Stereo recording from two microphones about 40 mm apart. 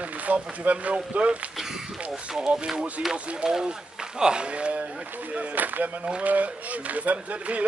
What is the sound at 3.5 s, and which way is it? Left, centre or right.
Speech, centre.